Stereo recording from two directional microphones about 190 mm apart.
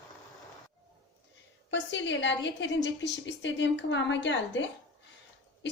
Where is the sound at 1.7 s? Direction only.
70° left (ahead or behind).